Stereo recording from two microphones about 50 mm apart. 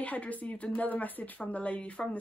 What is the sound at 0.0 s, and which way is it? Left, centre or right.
A woman's voice, left.